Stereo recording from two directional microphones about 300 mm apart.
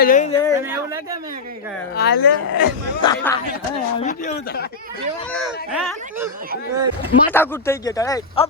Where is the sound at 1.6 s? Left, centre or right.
Centre.